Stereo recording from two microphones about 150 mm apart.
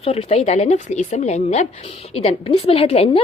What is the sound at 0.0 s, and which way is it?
A woman's voice, 40° left (ahead or behind).